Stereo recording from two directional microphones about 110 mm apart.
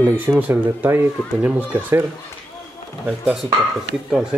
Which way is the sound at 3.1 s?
10° right (ahead or behind).